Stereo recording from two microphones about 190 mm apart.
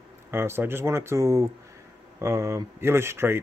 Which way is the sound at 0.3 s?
10° right (ahead or behind).